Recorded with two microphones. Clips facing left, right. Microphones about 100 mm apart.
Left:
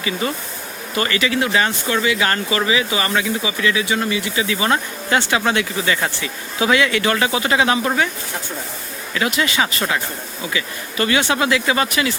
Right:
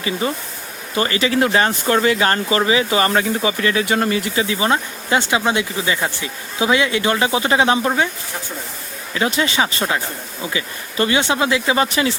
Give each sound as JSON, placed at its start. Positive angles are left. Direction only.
{"t": 0.2, "sound": "speech", "side_deg": -30}
{"t": 4.4, "sound": "speech", "side_deg": -25}
{"t": 9.1, "sound": "speech", "side_deg": -30}